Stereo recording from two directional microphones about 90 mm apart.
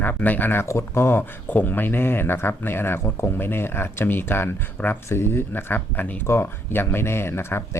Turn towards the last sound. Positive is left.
turn(degrees=25)  # may be behind; listen again after turning